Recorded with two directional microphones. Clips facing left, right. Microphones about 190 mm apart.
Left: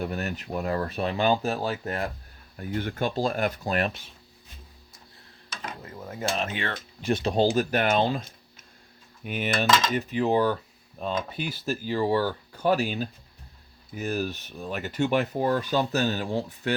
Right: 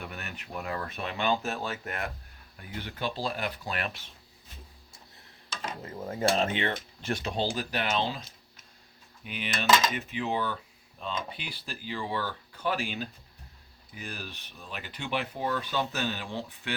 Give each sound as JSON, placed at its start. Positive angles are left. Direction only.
{"t": 0.0, "sound": "speech", "side_deg": 40}
{"t": 2.6, "sound": "speech", "side_deg": 50}
{"t": 5.5, "sound": "a sound", "side_deg": -30}
{"t": 6.1, "sound": "speech", "side_deg": -30}
{"t": 7.2, "sound": "speech", "side_deg": 40}
{"t": 7.5, "sound": "speech", "side_deg": 50}